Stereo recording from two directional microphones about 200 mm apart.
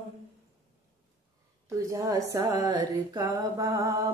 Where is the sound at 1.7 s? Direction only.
15° right (ahead or behind).